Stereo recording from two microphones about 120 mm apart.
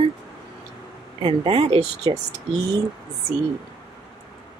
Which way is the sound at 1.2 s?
50° right (ahead or behind).